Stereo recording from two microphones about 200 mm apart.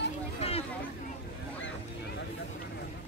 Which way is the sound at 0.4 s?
30° left (ahead or behind).